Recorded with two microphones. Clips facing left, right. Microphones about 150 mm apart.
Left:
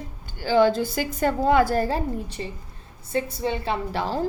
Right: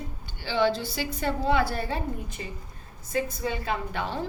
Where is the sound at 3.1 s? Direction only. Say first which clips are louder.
Left 3 dB; 25° left (ahead or behind).